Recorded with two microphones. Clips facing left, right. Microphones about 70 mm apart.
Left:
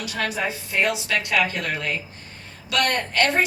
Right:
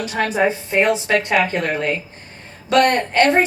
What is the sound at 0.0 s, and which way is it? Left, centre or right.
A woman's voice, right.